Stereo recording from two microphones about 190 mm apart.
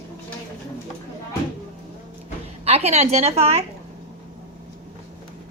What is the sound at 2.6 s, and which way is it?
A woman's voice, 35° right (ahead or behind).